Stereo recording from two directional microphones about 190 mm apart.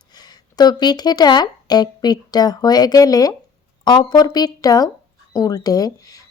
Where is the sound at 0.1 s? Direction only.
20° left (ahead or behind).